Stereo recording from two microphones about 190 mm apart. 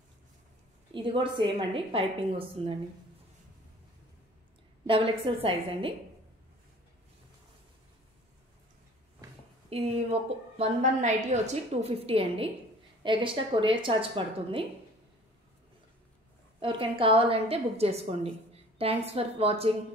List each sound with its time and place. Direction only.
0.9 s a woman's voice: 25° right (ahead or behind)
4.8 s a woman's voice: 30° right (ahead or behind)
9.7 s a woman's voice: 30° right (ahead or behind)
16.5 s a woman's voice: 25° right (ahead or behind)